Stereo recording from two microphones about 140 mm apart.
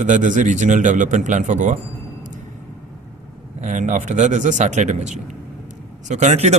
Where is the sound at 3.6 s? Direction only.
65° right (ahead or behind).